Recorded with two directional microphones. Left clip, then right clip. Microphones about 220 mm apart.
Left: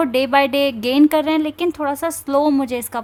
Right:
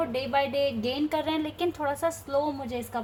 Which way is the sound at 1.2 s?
70° left (ahead or behind).